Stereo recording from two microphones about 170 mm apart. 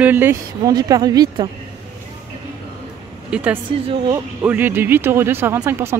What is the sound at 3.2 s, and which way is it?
Speech, 5° right (ahead or behind).